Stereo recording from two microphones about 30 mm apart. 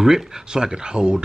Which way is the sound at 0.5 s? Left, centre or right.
Right.